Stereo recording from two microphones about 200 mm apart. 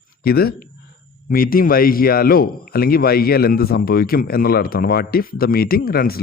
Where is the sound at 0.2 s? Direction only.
50° left (ahead or behind).